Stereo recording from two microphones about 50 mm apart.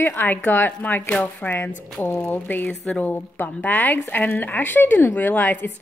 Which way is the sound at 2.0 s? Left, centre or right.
Left.